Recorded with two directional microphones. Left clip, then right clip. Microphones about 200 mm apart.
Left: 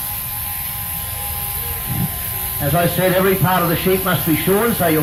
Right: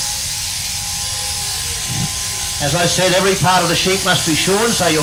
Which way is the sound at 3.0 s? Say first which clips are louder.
Right 3 dB; 45° right (ahead or behind).